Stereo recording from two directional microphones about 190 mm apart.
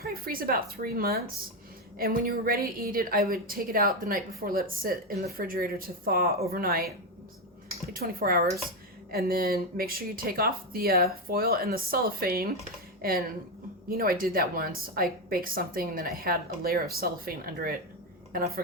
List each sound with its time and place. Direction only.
0.0 s a woman's voice: 50° right (ahead or behind)
7.9 s a woman's voice: 50° right (ahead or behind)